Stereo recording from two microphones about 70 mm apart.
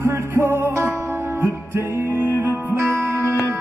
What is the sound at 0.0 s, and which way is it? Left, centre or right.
Music, right.